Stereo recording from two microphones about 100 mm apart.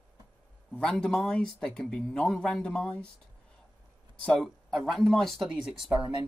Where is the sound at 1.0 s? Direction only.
5° left (ahead or behind).